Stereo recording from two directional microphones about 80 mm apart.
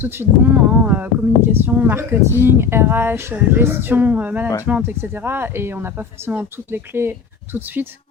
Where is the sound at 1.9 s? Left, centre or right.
Right.